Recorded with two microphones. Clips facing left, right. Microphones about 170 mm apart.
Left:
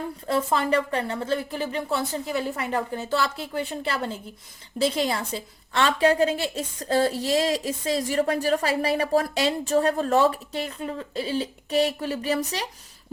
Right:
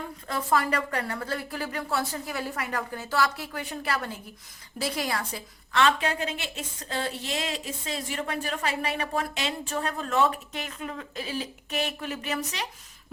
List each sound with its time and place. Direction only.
0.3 s a woman's voice: 25° left (ahead or behind)